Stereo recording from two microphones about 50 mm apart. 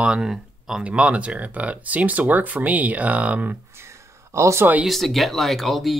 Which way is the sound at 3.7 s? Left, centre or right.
Right.